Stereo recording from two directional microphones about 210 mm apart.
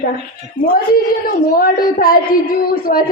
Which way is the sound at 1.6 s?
40° left (ahead or behind).